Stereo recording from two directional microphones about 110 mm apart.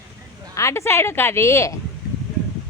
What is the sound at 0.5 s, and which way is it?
A woman's voice, 25° left (ahead or behind).